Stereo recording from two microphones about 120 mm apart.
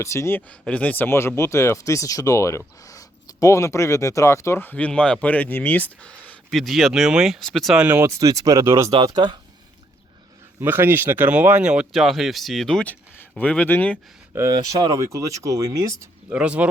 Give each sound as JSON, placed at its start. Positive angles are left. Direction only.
{"t": 0.0, "sound": "speech", "side_deg": 25}
{"t": 7.8, "sound": "speech", "side_deg": -20}
{"t": 9.0, "sound": "speech", "side_deg": -35}
{"t": 10.6, "sound": "speech", "side_deg": -20}
{"t": 14.3, "sound": "speech", "side_deg": -30}
{"t": 16.3, "sound": "speech", "side_deg": -10}